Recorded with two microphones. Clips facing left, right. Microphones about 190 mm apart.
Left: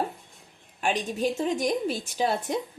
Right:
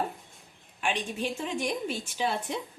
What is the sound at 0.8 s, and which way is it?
A woman's voice, 40° left (ahead or behind).